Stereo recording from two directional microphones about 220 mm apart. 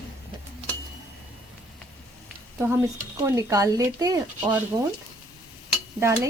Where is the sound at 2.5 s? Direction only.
10° right (ahead or behind).